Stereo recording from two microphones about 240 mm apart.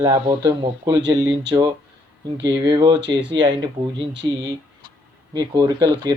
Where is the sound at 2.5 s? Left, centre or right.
Centre.